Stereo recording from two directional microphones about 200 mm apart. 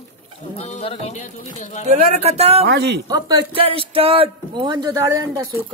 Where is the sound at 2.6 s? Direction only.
55° right (ahead or behind).